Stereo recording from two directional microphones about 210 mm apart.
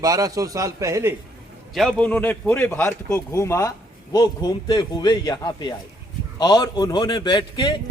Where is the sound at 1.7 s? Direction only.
Centre (ahead or behind).